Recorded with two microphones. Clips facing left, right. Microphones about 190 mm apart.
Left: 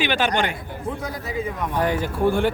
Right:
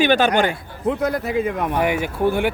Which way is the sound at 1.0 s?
60° right (ahead or behind).